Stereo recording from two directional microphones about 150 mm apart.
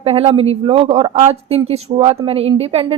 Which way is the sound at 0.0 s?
40° right (ahead or behind).